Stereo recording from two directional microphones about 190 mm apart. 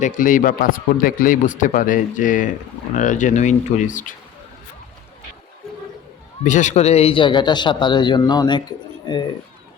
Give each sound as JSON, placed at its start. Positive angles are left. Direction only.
{"t": 0.0, "sound": "a man's voice", "side_deg": 45}
{"t": 6.4, "sound": "speech", "side_deg": 40}